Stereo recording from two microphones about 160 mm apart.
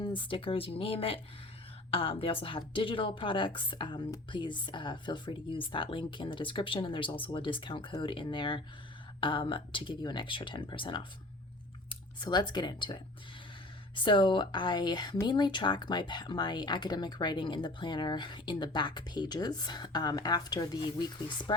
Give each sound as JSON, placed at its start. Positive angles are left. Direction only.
{"t": 0.0, "sound": "a woman's voice", "side_deg": 30}